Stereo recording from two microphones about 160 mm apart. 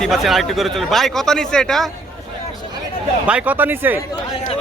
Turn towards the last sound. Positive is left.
turn(degrees=-10)  # may be behind; listen again after turning